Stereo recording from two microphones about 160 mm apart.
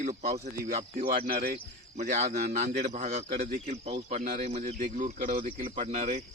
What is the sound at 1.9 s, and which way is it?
Speech, 45° right (ahead or behind).